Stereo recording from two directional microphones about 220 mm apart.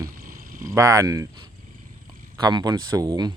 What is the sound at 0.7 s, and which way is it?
Speech, 15° right (ahead or behind).